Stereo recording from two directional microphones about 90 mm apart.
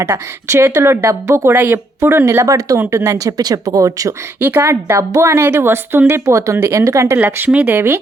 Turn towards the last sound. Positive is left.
turn(degrees=-25)  # may be behind; listen again after turning